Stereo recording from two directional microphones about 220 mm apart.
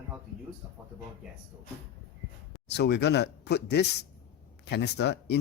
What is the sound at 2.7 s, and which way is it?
Speech, 50° left (ahead or behind).